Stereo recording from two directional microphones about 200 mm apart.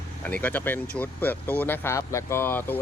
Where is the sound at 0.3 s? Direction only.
10° left (ahead or behind).